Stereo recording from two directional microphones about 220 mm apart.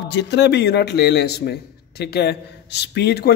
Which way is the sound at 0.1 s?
50° left (ahead or behind).